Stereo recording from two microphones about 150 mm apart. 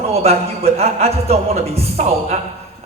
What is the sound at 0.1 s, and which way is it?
A man's voice, 45° right (ahead or behind).